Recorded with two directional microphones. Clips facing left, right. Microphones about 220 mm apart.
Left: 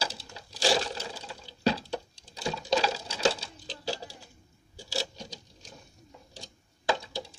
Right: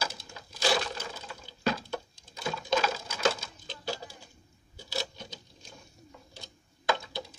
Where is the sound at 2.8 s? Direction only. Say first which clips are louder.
Left 1 dB; 35° left (ahead or behind).